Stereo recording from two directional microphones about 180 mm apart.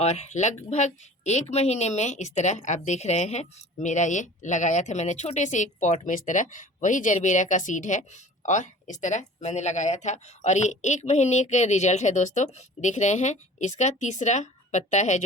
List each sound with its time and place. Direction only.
0.0 s speech: 40° left (ahead or behind)